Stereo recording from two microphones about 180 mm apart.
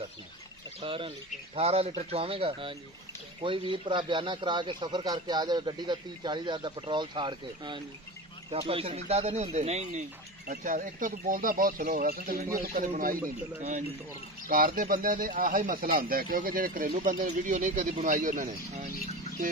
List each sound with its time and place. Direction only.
0.7 s speech: 30° right (ahead or behind)
10.4 s speech: 50° right (ahead or behind)
14.5 s speech: 50° right (ahead or behind)